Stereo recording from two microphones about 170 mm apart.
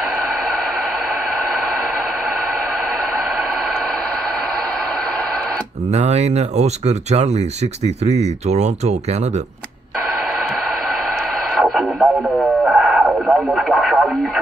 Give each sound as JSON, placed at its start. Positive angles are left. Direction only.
{"t": 5.9, "sound": "speech", "side_deg": -40}
{"t": 11.5, "sound": "radio", "side_deg": 0}